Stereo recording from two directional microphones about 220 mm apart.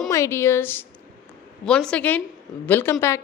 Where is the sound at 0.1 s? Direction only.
15° left (ahead or behind).